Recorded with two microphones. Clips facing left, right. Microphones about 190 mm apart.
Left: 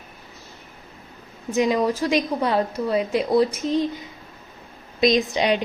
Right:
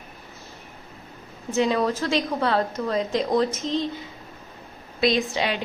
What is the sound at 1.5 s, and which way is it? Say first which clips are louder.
A woman's voice: left 2 dB; 15° left (ahead or behind).